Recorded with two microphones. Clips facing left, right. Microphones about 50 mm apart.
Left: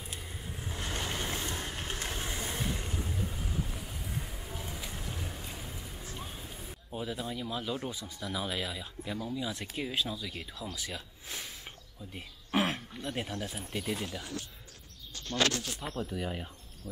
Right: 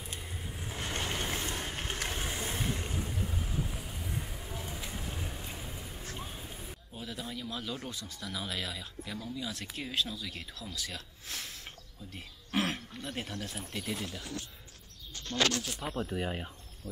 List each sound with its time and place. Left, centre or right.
0.0 s vehicle: centre
6.1 s music: centre
6.9 s speech: centre
15.8 s speech: centre
16.8 s speech: centre